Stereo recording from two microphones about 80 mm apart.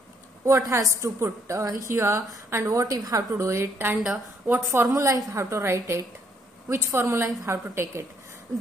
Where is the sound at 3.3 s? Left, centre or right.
Right.